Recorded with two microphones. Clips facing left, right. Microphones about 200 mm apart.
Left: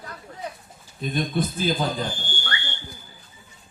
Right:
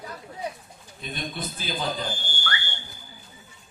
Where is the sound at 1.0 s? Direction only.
45° left (ahead or behind).